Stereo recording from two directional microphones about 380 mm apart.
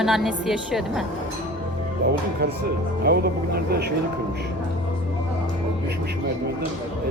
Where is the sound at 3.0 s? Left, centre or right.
Right.